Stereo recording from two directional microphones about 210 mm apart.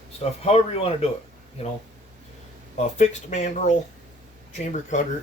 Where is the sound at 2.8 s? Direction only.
30° left (ahead or behind).